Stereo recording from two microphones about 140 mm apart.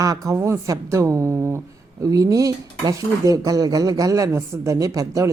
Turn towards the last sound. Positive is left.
turn(degrees=-20)  # may be behind; listen again after turning